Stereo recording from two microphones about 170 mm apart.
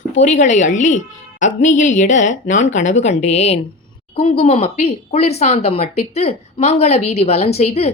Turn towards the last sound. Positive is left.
turn(degrees=40)  # may be behind; listen again after turning